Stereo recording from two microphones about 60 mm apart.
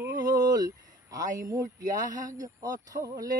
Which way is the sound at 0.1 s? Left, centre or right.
Right.